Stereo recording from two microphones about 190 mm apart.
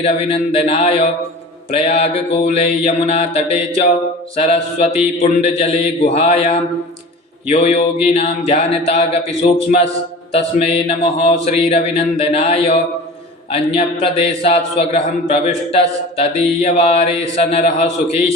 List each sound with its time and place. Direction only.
0.0 s a man's voice: 30° left (ahead or behind)